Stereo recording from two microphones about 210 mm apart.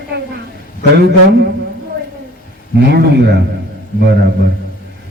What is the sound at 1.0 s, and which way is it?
Speech, 55° right (ahead or behind).